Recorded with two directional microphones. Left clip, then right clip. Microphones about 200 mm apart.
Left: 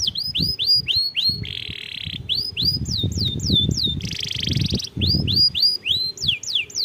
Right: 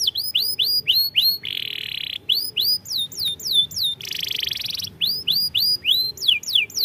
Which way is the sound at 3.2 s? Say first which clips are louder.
Right 1 dB; 25° right (ahead or behind).